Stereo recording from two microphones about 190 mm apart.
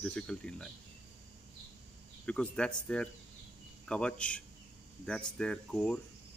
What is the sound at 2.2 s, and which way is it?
Speech, 5° left (ahead or behind).